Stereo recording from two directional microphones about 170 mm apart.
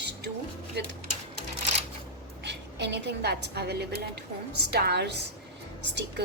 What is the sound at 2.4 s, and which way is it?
A woman's voice, 90° right.